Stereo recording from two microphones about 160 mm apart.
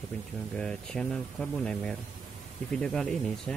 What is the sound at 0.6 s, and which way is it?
Speech, 5° left (ahead or behind).